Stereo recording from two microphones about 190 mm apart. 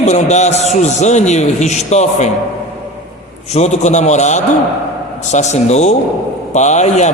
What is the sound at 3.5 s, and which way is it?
A man's voice, 35° left (ahead or behind).